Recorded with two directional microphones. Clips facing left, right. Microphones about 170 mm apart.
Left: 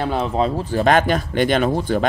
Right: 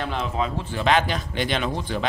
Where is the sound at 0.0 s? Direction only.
35° left (ahead or behind).